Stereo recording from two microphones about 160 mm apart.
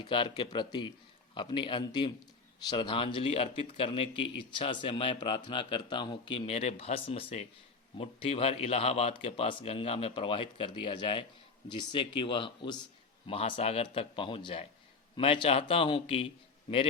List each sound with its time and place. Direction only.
0.0 s speech: 30° left (ahead or behind)